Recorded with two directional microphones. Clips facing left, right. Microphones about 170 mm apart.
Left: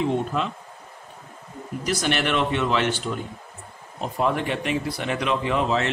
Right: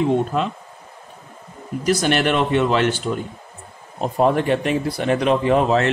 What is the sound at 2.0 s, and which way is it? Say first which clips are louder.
Speech: right 3 dB; 40° right (ahead or behind).